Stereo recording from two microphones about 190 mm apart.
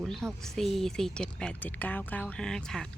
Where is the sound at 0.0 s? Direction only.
Centre (ahead or behind).